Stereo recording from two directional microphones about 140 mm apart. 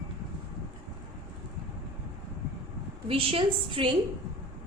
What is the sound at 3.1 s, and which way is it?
Speech, 40° right (ahead or behind).